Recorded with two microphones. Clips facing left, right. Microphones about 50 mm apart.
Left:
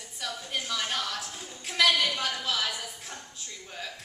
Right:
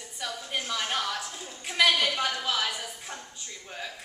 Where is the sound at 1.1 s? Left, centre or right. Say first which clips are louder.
Right 2 dB; centre.